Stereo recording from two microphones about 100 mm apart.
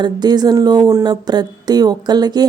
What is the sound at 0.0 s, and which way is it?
A woman's voice, 45° right (ahead or behind).